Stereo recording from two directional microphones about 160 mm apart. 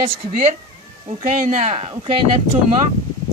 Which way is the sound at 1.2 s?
50° right (ahead or behind).